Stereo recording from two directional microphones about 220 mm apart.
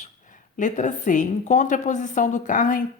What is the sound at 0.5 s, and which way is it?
A woman's voice, 35° left (ahead or behind).